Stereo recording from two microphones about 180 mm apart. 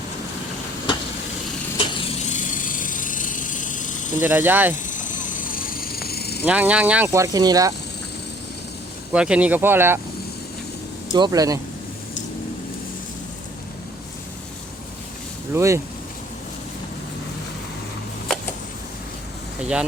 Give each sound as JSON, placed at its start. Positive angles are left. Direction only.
{"t": 2.2, "sound": "vehicle", "side_deg": 45}
{"t": 4.2, "sound": "speech", "side_deg": -10}
{"t": 4.7, "sound": "vehicle", "side_deg": 45}
{"t": 6.4, "sound": "speech", "side_deg": -10}
{"t": 7.1, "sound": "speech", "side_deg": -20}
{"t": 9.1, "sound": "speech", "side_deg": -5}
{"t": 11.1, "sound": "speech", "side_deg": -20}
{"t": 15.5, "sound": "speech", "side_deg": -15}
{"t": 19.5, "sound": "vehicle", "side_deg": -5}